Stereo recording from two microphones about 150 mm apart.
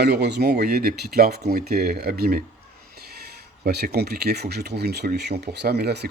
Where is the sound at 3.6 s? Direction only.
90° right.